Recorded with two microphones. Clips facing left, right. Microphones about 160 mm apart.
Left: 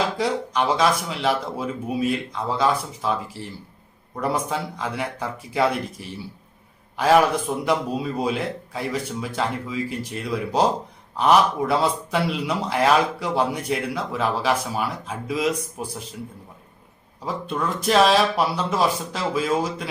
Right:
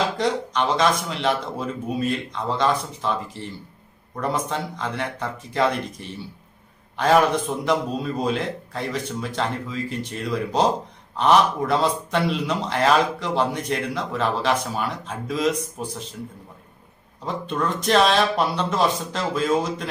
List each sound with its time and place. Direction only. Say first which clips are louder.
0.2 s a man's voice: even; 5° left (ahead or behind)
17.2 s a man's voice: right 1 dB; 5° left (ahead or behind)